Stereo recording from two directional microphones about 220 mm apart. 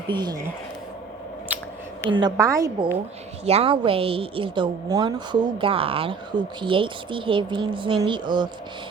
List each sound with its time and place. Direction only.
0.1 s a woman's voice: 20° right (ahead or behind)
2.0 s a woman's voice: 20° right (ahead or behind)
3.4 s speech: 25° right (ahead or behind)